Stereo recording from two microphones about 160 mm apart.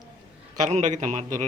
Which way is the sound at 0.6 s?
50° right (ahead or behind).